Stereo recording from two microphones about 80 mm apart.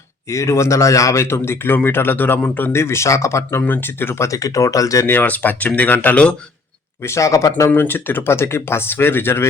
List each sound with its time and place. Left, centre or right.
0.3 s speech: left
2.7 s speech: left
3.6 s speech: left
5.0 s speech: left
7.0 s speech: left
7.7 s speech: left